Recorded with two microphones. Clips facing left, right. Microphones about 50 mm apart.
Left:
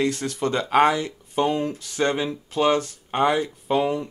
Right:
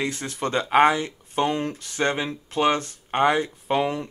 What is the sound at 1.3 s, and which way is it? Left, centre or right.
Speech, right.